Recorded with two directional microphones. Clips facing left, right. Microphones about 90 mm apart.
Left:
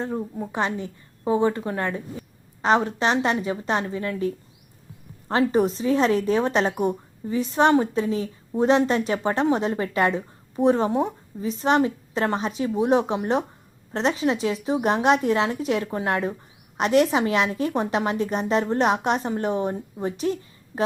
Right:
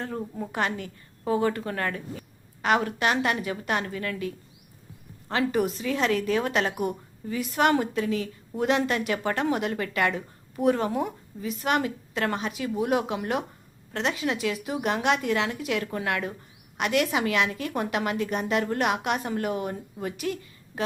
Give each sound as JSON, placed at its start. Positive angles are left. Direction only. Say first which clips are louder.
{"t": 0.2, "sound": "a woman's voice", "louder": "left 3 dB", "side_deg": 5}
{"t": 0.5, "sound": "a woman's voice", "louder": "left 3 dB", "side_deg": 20}
{"t": 5.3, "sound": "a woman's voice", "louder": "left 5 dB", "side_deg": 35}